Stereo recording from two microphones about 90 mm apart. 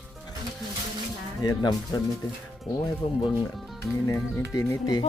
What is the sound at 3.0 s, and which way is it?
Speech, 75° left (ahead or behind).